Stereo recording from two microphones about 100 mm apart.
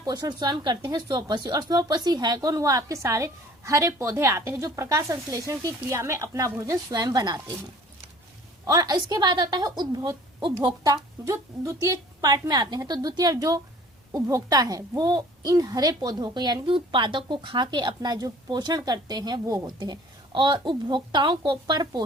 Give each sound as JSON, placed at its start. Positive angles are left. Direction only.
{"t": 0.0, "sound": "speech", "side_deg": -40}
{"t": 8.6, "sound": "speech", "side_deg": -40}
{"t": 12.2, "sound": "speech", "side_deg": -45}
{"t": 16.6, "sound": "speech", "side_deg": -60}